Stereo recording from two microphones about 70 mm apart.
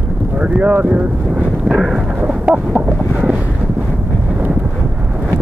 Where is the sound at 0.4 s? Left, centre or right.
Right.